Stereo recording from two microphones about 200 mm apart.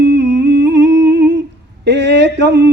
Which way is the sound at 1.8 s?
60° right (ahead or behind).